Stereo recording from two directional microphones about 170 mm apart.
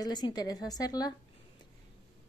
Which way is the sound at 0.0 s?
25° left (ahead or behind).